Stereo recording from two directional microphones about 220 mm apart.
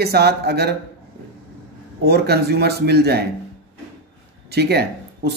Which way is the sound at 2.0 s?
45° right (ahead or behind).